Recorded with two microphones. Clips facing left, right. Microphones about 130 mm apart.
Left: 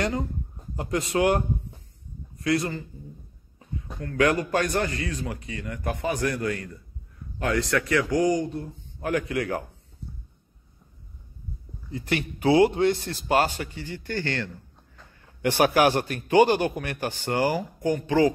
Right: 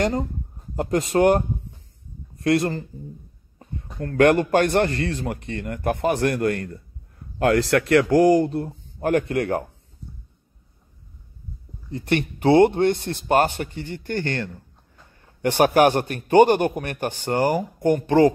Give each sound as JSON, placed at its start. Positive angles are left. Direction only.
{"t": 0.7, "sound": "speech", "side_deg": -45}
{"t": 2.4, "sound": "speech", "side_deg": -55}
{"t": 4.0, "sound": "speech", "side_deg": -45}
{"t": 4.3, "sound": "speech", "side_deg": -65}
{"t": 7.3, "sound": "a man's voice", "side_deg": -65}
{"t": 9.0, "sound": "speech", "side_deg": -45}
{"t": 11.9, "sound": "speech", "side_deg": -55}